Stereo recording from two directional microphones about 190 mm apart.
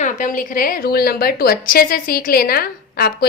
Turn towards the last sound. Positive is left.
turn(degrees=50)  # may be behind; listen again after turning